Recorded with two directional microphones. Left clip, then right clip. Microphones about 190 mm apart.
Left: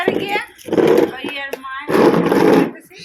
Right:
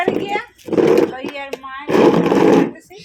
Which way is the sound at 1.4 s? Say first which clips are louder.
Left 2 dB; 40° right (ahead or behind).